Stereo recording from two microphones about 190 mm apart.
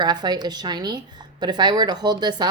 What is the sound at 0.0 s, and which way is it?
A woman's voice, 20° right (ahead or behind).